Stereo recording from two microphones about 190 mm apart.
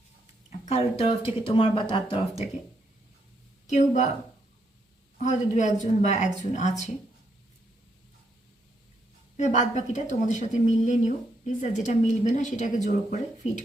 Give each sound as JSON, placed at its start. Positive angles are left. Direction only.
{"t": 0.6, "sound": "speech", "side_deg": 30}
{"t": 3.7, "sound": "speech", "side_deg": 40}
{"t": 5.2, "sound": "speech", "side_deg": 40}
{"t": 9.4, "sound": "speech", "side_deg": 40}